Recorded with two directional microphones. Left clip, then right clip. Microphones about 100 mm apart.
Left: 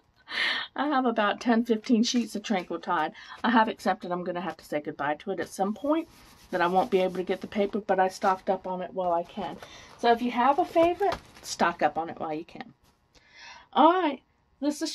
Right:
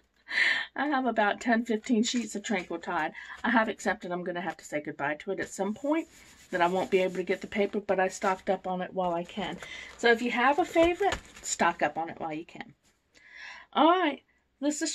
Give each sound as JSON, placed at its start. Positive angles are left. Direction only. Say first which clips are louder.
{"t": 0.3, "sound": "speech", "louder": "right 2 dB", "side_deg": 50}
{"t": 8.6, "sound": "speech", "louder": "even", "side_deg": 5}
{"t": 8.9, "sound": "speech", "louder": "left 5 dB", "side_deg": -10}
{"t": 11.4, "sound": "speech", "louder": "left 2 dB", "side_deg": 30}
{"t": 13.4, "sound": "a sound", "louder": "left 4 dB", "side_deg": 30}